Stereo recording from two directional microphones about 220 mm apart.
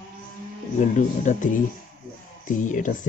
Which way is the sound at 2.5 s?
35° left (ahead or behind).